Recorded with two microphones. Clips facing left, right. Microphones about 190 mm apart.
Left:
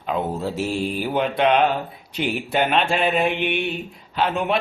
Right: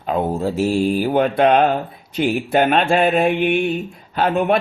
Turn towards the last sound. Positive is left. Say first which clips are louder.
# right 5 dB
turn(degrees=-50)  # may be behind; listen again after turning